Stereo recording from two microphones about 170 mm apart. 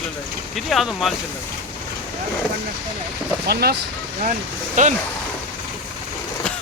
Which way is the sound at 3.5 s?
65° right (ahead or behind).